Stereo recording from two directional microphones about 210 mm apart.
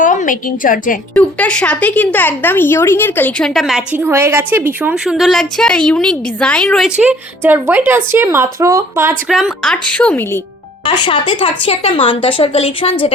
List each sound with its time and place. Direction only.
0.0 s a woman's voice: 40° left (ahead or behind)
1.1 s speech: 5° left (ahead or behind); by 9.1 s 15° right (ahead or behind)
9.3 s speech: centre (ahead or behind)
10.8 s a woman's voice: 20° left (ahead or behind)